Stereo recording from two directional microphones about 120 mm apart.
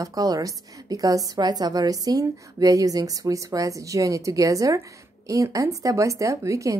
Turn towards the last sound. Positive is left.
turn(degrees=-25)  # may be behind; listen again after turning